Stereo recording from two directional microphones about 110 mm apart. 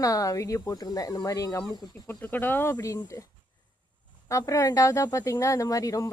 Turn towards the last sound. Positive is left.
turn(degrees=30)  # may be behind; listen again after turning